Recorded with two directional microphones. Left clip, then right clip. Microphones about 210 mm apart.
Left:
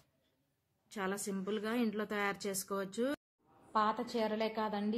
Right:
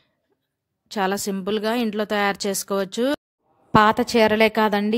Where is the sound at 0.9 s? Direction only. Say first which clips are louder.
Right 16 dB; 45° right (ahead or behind).